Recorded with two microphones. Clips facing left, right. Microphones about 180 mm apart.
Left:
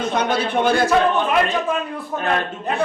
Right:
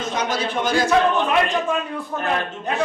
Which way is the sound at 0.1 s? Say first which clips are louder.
Left 2 dB; 60° left (ahead or behind).